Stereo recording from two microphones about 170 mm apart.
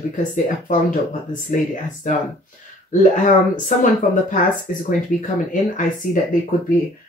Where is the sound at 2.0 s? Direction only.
45° left (ahead or behind).